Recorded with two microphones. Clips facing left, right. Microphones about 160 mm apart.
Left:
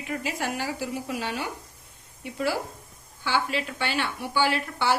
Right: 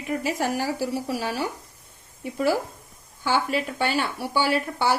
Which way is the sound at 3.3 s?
40° right (ahead or behind).